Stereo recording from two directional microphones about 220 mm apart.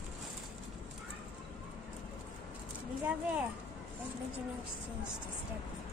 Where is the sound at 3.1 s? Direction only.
5° right (ahead or behind).